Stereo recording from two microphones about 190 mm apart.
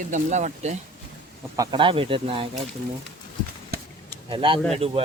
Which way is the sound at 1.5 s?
20° right (ahead or behind).